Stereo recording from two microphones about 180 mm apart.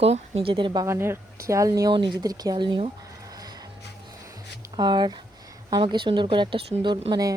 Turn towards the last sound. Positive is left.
turn(degrees=-25)  # may be behind; listen again after turning